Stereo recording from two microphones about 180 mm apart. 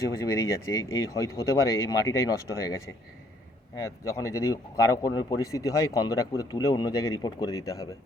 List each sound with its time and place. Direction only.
0.2 s speech: 15° left (ahead or behind)